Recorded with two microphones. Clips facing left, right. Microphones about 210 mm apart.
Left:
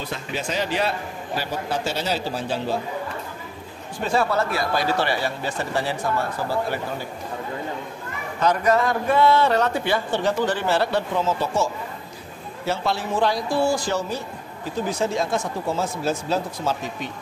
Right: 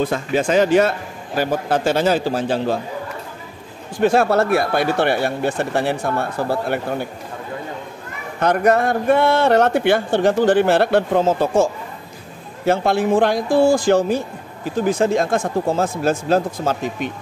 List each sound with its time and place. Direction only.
0.0 s a man's voice: 50° right (ahead or behind)
4.0 s a man's voice: 85° right; by 7.1 s 60° right (ahead or behind)
8.4 s a man's voice: 60° right (ahead or behind)